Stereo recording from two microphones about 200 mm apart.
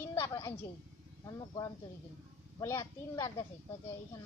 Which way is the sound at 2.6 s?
15° left (ahead or behind).